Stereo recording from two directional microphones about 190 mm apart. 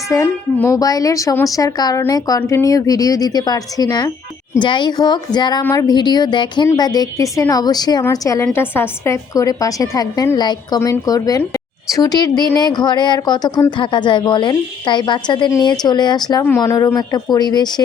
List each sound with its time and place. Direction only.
0.1 s a woman's voice: 15° left (ahead or behind)